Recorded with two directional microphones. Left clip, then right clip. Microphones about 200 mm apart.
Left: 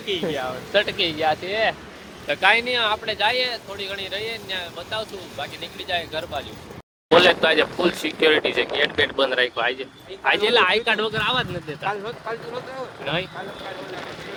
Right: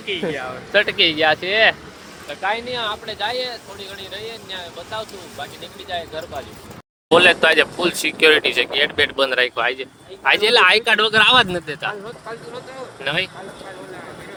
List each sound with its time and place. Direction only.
0.3 s speech: 10° left (ahead or behind)
0.7 s speech: 10° right (ahead or behind)
0.9 s speech: 25° right (ahead or behind)
2.2 s speech: 45° left (ahead or behind)
2.6 s speech: 5° left (ahead or behind)
7.1 s speech: 15° right (ahead or behind)
10.5 s speech: 30° right (ahead or behind)
10.9 s speech: 50° right (ahead or behind)
13.1 s speech: 50° right (ahead or behind)